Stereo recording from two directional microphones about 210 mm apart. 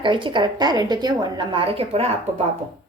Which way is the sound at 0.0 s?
20° right (ahead or behind).